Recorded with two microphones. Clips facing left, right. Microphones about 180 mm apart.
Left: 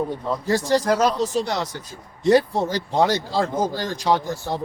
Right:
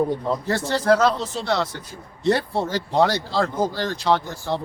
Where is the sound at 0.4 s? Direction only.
15° left (ahead or behind).